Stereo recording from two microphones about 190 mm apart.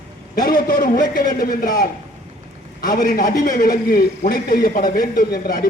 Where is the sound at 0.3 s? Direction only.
50° left (ahead or behind).